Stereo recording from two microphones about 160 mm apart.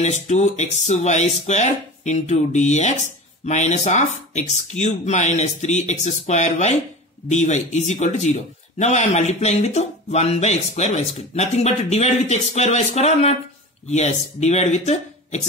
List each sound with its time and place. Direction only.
0.0 s a man's voice: 45° left (ahead or behind)